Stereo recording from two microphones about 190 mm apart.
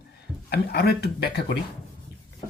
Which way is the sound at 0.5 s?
60° left (ahead or behind).